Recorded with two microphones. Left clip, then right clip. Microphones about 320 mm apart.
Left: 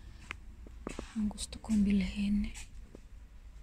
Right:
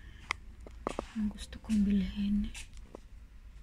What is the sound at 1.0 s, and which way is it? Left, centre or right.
Whispering, right.